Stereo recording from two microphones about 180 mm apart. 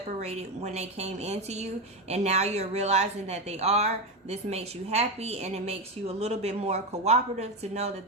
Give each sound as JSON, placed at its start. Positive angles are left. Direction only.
{"t": 0.2, "sound": "speech", "side_deg": -35}